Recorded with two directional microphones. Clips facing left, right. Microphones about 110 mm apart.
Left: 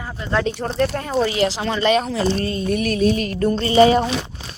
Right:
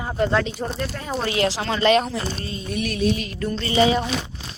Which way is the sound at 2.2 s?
70° left (ahead or behind).